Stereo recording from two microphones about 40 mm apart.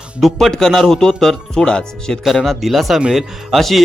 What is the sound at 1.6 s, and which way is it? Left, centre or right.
Speech, left.